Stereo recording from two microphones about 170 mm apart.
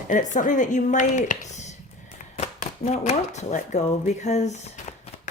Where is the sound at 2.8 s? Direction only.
45° left (ahead or behind).